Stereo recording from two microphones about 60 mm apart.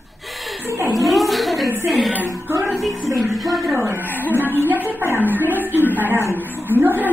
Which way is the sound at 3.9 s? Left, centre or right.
Right.